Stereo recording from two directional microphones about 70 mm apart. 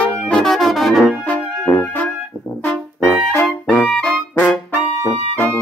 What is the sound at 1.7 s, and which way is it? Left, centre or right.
Music, left.